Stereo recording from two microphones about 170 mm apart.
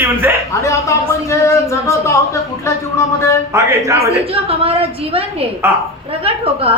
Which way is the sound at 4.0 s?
35° right (ahead or behind).